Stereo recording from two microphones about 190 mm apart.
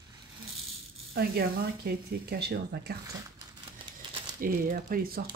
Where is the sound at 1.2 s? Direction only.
55° right (ahead or behind).